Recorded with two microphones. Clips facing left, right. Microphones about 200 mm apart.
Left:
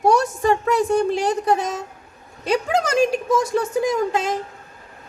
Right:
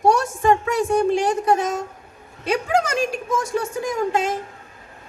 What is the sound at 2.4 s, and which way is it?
Speech, 40° left (ahead or behind).